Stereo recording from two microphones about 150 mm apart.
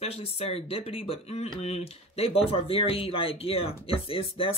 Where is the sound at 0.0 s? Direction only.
40° left (ahead or behind).